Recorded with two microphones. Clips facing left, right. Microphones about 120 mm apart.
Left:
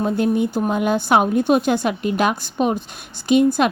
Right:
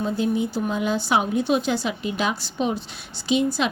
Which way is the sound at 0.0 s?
55° left (ahead or behind).